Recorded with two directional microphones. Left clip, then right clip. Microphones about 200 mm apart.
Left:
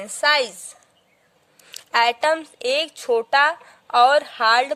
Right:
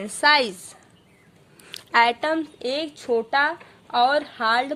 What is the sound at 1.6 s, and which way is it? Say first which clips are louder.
A woman's voice: even; 30° left (ahead or behind).